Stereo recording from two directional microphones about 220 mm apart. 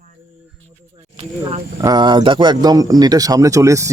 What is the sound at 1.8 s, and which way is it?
Speech, 20° right (ahead or behind).